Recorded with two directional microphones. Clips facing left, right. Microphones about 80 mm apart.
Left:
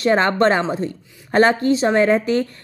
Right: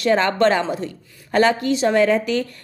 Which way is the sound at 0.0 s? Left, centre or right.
Left.